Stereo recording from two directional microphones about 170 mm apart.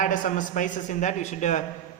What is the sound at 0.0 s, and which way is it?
A man's voice, 50° left (ahead or behind).